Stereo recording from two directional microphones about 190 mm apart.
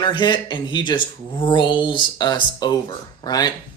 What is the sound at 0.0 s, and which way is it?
Speech, 25° left (ahead or behind).